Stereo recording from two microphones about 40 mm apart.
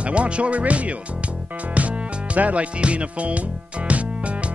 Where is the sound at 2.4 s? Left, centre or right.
Right.